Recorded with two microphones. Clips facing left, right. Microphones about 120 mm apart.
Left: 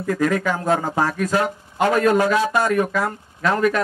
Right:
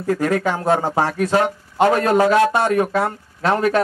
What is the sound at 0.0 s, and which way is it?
Speech, 35° right (ahead or behind).